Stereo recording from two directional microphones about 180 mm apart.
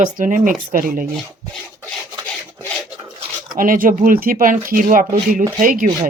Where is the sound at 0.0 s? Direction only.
45° right (ahead or behind).